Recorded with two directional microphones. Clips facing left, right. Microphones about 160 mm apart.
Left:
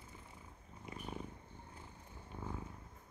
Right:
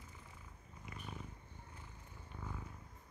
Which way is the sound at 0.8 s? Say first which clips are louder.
Left 4 dB; 30° left (ahead or behind).